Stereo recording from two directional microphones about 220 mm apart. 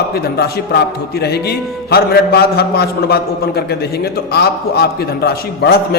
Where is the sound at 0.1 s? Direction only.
45° left (ahead or behind).